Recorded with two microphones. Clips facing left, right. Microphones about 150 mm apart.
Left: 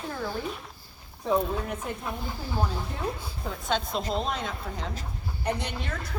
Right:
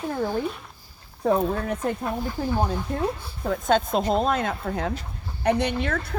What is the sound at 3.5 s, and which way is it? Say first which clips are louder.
A woman's voice: right 8 dB; 50° right (ahead or behind).